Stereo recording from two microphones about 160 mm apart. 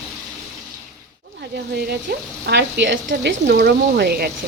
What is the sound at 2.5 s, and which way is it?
Speech, 90° right.